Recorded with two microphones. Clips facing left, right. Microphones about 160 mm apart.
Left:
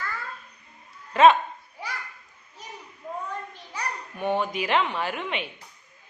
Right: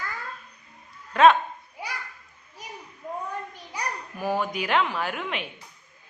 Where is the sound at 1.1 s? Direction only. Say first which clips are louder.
Even; centre (ahead or behind).